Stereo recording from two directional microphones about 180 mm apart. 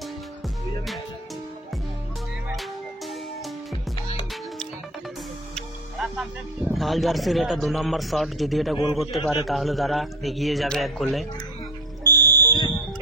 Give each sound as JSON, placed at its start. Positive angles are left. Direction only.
{"t": 5.9, "sound": "speech", "side_deg": -5}
{"t": 12.0, "sound": "music", "side_deg": -20}